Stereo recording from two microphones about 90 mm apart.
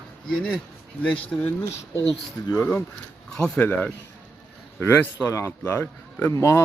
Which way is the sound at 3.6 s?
20° left (ahead or behind).